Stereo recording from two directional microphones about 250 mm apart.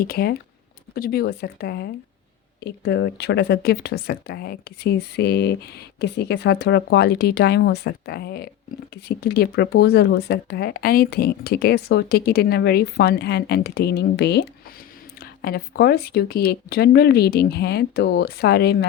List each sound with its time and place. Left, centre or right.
0.0 s speech: left